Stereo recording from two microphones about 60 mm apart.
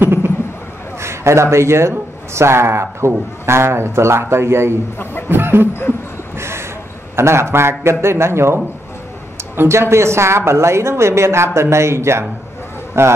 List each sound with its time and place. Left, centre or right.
0.0 s a sound: right
0.9 s speech: right
5.3 s music: right
6.3 s a sound: right
7.2 s speech: right
9.6 s speech: right